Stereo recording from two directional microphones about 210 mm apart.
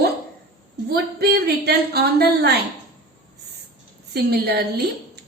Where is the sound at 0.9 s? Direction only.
50° right (ahead or behind).